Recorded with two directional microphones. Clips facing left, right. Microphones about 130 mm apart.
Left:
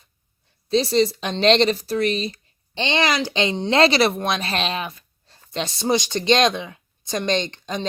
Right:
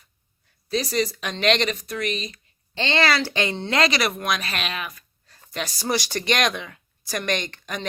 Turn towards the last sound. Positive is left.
turn(degrees=25)  # may be behind; listen again after turning